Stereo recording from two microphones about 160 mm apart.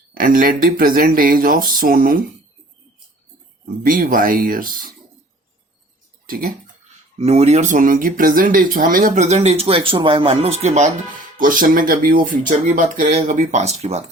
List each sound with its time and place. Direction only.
0.1 s speech: 60° right (ahead or behind)
3.8 s speech: 60° right (ahead or behind)
6.2 s speech: 60° right (ahead or behind)
7.2 s speech: 40° right (ahead or behind)
11.3 s speech: 60° right (ahead or behind); by 14.0 s 40° right (ahead or behind)